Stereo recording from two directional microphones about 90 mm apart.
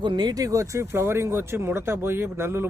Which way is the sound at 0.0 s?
55° right (ahead or behind).